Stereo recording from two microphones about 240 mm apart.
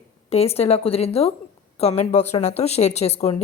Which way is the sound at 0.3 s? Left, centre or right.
Left.